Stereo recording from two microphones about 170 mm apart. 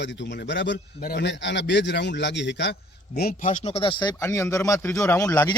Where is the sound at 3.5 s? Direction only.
40° left (ahead or behind); by 5.6 s 20° left (ahead or behind).